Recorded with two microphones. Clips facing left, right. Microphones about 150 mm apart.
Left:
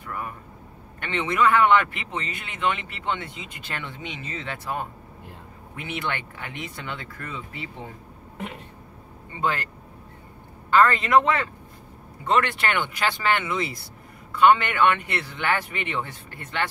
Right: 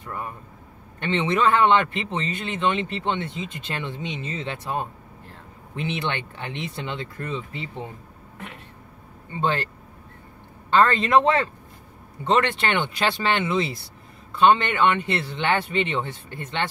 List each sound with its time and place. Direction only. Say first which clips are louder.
0.0 s a man's voice: even; 25° right (ahead or behind)
9.4 s a man's voice: right 2 dB; 25° right (ahead or behind)
10.7 s a man's voice: even; 30° right (ahead or behind)